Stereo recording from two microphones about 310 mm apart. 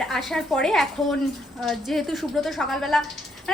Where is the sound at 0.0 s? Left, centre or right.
Centre.